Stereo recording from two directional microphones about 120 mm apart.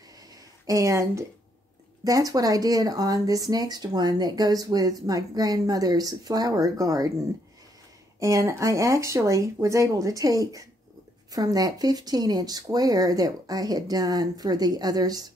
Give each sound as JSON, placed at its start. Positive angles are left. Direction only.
{"t": 0.7, "sound": "speech", "side_deg": -25}
{"t": 8.2, "sound": "speech", "side_deg": -25}